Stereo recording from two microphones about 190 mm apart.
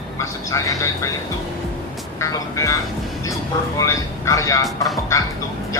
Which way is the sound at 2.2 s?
15° left (ahead or behind).